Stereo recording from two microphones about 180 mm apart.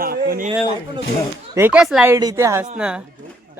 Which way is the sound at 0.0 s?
55° right (ahead or behind).